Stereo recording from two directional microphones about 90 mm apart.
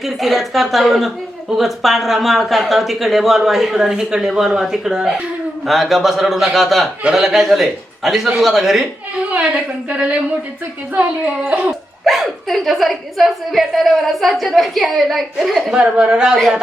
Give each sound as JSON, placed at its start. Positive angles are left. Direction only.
{"t": 0.0, "sound": "a woman's voice", "side_deg": 0}
{"t": 9.9, "sound": "dog", "side_deg": -15}
{"t": 11.4, "sound": "dog", "side_deg": -15}
{"t": 12.0, "sound": "a woman's voice", "side_deg": 0}